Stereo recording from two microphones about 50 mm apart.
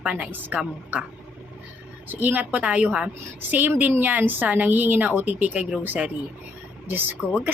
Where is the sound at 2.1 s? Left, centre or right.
Right.